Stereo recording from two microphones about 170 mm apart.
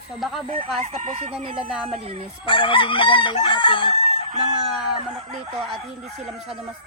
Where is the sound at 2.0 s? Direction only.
35° right (ahead or behind).